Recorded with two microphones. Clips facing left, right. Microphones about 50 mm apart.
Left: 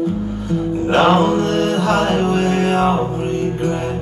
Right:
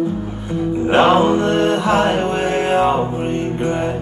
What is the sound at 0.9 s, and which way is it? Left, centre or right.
Music, centre.